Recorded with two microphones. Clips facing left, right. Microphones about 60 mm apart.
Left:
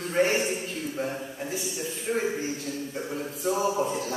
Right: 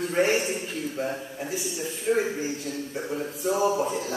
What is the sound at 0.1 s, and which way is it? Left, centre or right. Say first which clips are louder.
A man's voice: left 1 dB; centre.